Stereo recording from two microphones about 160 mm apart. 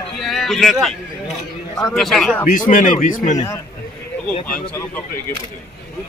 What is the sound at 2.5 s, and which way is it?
Speech, 55° left (ahead or behind).